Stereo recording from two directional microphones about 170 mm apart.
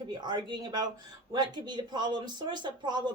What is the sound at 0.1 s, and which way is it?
Speech, 25° right (ahead or behind).